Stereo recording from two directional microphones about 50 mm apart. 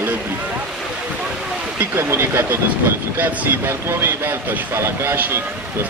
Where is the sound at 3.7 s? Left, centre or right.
Right.